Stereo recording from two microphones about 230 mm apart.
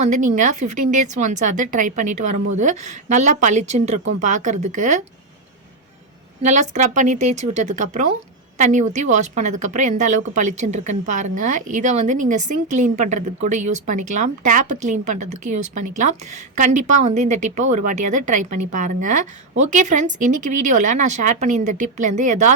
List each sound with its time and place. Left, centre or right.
0.0 s a woman's voice: right
6.4 s a woman's voice: right